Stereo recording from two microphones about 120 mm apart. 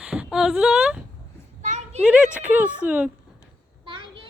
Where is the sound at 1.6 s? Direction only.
70° right (ahead or behind).